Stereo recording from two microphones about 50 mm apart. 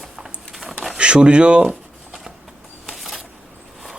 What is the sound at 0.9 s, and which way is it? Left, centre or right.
Speech, right.